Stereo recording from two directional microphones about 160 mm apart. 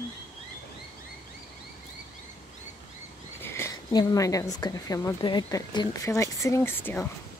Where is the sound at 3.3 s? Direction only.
15° left (ahead or behind).